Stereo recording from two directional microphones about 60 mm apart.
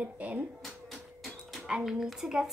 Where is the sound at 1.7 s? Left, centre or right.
Centre.